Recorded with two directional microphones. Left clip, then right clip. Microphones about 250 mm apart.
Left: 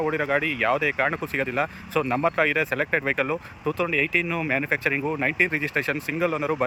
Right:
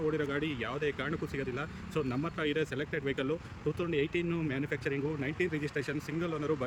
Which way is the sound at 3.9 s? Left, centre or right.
Left.